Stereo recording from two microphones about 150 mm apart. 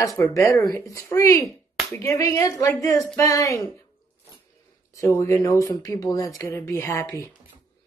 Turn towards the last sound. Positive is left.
turn(degrees=20)  # may be behind; listen again after turning